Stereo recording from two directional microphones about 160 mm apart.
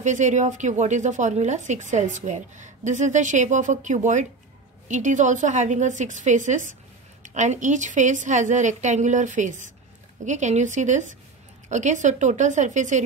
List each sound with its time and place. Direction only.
0.0 s a woman's voice: 50° right (ahead or behind)